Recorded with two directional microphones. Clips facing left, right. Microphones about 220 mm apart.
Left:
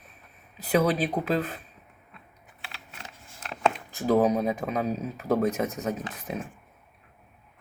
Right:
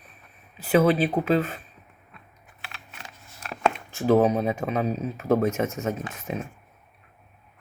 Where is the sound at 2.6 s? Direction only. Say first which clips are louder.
Even; 30° left (ahead or behind).